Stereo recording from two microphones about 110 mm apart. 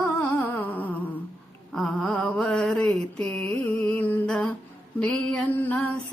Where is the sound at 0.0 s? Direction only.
15° left (ahead or behind).